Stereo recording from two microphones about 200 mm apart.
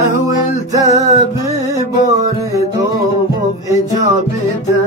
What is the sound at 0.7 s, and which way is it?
Music, 15° right (ahead or behind).